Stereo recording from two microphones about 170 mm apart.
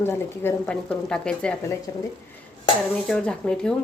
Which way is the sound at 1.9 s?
20° left (ahead or behind).